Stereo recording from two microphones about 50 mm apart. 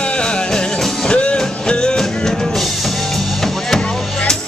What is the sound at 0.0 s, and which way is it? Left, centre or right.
Music, left.